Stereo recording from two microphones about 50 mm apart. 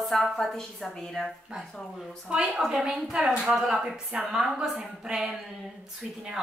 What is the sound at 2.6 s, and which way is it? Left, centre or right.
A woman's voice, centre.